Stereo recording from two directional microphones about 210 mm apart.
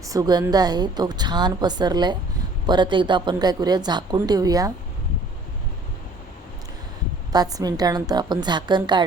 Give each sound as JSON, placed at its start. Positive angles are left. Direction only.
{"t": 0.1, "sound": "a woman's voice", "side_deg": -20}
{"t": 7.3, "sound": "a woman's voice", "side_deg": -20}